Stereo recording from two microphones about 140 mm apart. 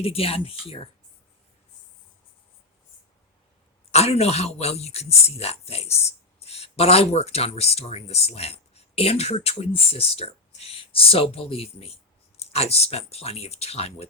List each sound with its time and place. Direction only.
0.0 s speech: 45° left (ahead or behind)
3.9 s speech: 50° left (ahead or behind)